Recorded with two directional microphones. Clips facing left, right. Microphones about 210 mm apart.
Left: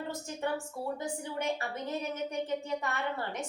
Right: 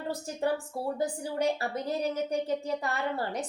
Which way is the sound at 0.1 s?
35° right (ahead or behind).